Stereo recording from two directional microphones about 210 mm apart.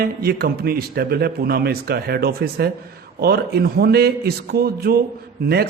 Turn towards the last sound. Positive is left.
turn(degrees=-50)  # may be behind; listen again after turning